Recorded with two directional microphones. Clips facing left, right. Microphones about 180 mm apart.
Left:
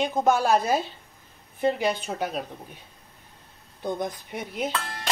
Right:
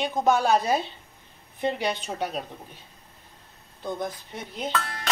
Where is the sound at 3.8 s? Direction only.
15° left (ahead or behind).